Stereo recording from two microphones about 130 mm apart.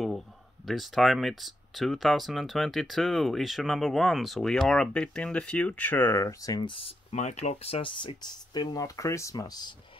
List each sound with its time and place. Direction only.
0.7 s speech: centre (ahead or behind); by 7.2 s 40° left (ahead or behind)
7.2 s speech: 65° left (ahead or behind); by 9.8 s 30° left (ahead or behind)